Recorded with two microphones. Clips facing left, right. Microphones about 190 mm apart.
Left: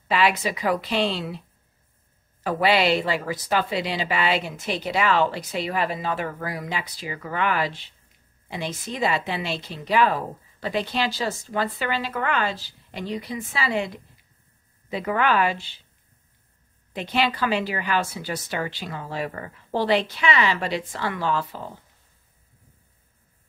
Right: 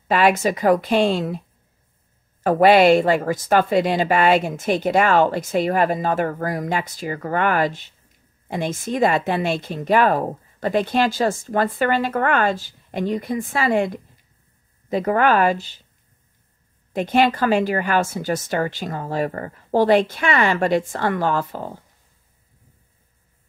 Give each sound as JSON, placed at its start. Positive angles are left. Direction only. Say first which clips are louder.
{"t": 0.1, "sound": "a woman's voice", "louder": "right 5 dB", "side_deg": -50}
{"t": 2.4, "sound": "a woman's voice", "louder": "right 8 dB", "side_deg": -50}
{"t": 16.9, "sound": "a woman's voice", "louder": "right 7 dB", "side_deg": -50}